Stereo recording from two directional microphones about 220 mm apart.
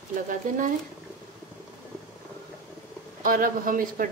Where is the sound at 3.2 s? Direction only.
40° right (ahead or behind).